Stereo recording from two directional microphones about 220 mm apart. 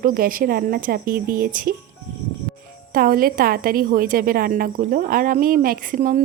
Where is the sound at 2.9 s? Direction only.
40° right (ahead or behind).